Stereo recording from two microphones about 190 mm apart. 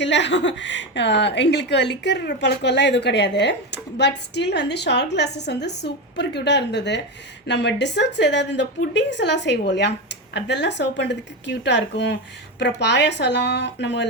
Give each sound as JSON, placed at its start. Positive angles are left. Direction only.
{"t": 0.0, "sound": "a woman's voice", "side_deg": 70}